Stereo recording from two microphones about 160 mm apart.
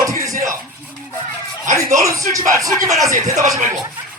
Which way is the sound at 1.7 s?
20° right (ahead or behind).